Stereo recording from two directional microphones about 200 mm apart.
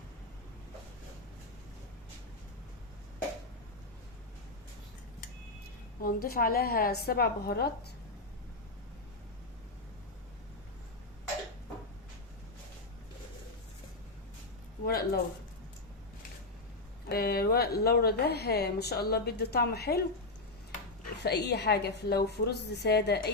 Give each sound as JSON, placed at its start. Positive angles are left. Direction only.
{"t": 6.0, "sound": "a woman's voice", "side_deg": 45}
{"t": 14.8, "sound": "speech", "side_deg": 50}
{"t": 17.1, "sound": "a woman's voice", "side_deg": 50}
{"t": 21.2, "sound": "a woman's voice", "side_deg": 55}